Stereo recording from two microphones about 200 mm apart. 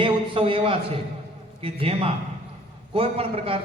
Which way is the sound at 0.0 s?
25° right (ahead or behind).